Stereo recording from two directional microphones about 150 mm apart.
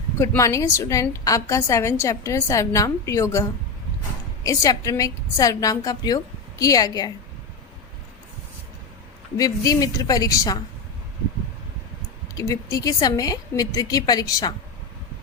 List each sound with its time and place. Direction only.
0.2 s a woman's voice: 20° left (ahead or behind)
4.4 s a woman's voice: 20° left (ahead or behind)
9.4 s a woman's voice: 25° left (ahead or behind)
12.3 s a woman's voice: 25° left (ahead or behind)